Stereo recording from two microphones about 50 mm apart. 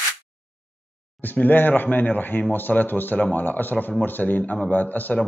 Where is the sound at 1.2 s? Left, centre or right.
Left.